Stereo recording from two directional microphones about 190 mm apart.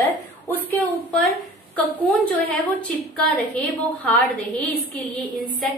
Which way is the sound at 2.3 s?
10° left (ahead or behind).